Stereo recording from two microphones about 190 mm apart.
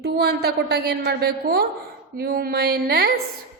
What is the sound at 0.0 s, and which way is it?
A woman's voice, 60° right (ahead or behind).